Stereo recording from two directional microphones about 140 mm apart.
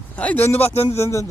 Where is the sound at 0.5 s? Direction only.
45° left (ahead or behind).